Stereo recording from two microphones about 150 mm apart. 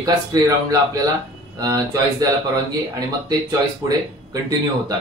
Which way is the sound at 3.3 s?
25° right (ahead or behind).